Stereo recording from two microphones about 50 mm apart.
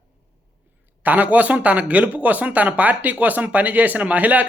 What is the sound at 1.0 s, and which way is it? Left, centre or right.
Speech, right.